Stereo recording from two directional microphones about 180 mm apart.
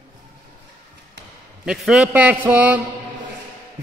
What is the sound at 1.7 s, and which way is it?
A man's voice, 5° right (ahead or behind).